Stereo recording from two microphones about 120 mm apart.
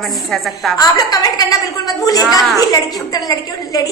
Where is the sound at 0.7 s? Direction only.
30° left (ahead or behind).